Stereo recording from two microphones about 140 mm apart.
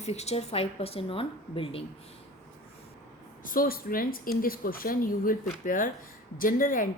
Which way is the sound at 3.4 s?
90° left.